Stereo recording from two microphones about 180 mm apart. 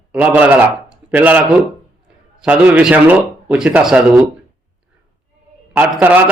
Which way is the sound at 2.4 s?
5° right (ahead or behind).